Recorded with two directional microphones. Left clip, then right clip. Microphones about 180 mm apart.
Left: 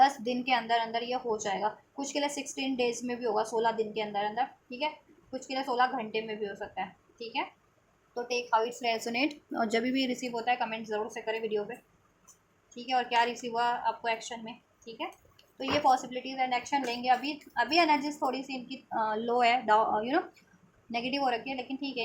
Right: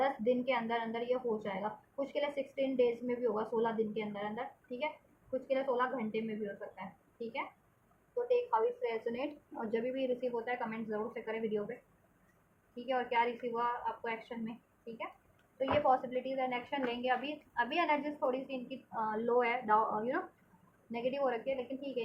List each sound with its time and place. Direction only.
0.0 s a woman's voice: 45° left (ahead or behind)
8.3 s speech: 55° left (ahead or behind); by 11.6 s 35° left (ahead or behind)
12.7 s a woman's voice: 40° left (ahead or behind)
15.5 s a woman's voice: 40° left (ahead or behind)